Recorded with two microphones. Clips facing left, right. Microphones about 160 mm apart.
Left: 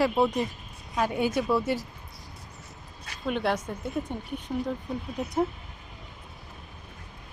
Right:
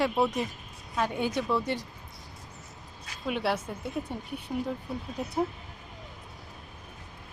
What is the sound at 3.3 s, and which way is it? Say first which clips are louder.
Speech: left 2 dB; 5° right (ahead or behind).